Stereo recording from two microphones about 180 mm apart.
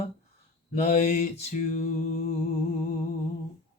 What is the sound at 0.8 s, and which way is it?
Mantra, 40° left (ahead or behind).